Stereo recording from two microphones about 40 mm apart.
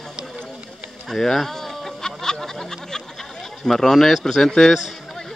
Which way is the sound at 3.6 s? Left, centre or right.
Centre.